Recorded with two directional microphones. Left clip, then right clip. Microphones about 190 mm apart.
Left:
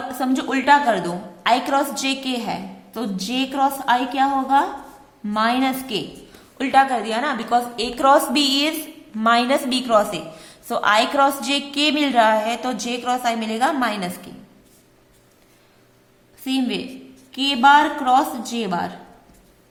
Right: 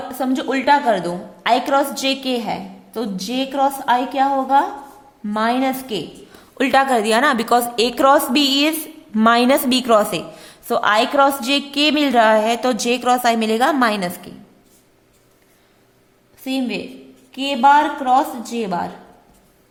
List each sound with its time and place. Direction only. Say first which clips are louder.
0.1 s a woman's voice: right 2 dB; 20° right (ahead or behind)
6.6 s a woman's voice: right 2 dB; 45° right (ahead or behind); by 8.7 s 25° right (ahead or behind)
9.1 s a woman's voice: right 3 dB; 40° right (ahead or behind)
16.4 s a woman's voice: even; 15° right (ahead or behind)